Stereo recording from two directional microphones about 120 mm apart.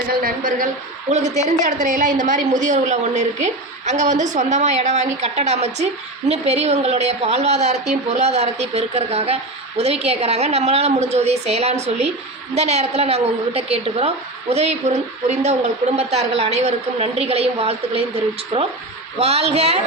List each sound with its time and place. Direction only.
1.1 s a woman's voice: 75° right (ahead or behind); by 19.8 s 60° right (ahead or behind)